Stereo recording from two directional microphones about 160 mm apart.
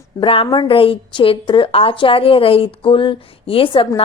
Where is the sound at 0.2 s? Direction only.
35° left (ahead or behind).